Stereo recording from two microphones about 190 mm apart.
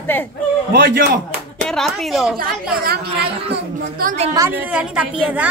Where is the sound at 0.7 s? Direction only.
50° right (ahead or behind).